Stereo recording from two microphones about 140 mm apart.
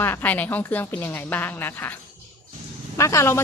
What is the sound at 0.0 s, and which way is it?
A woman's voice, 15° left (ahead or behind).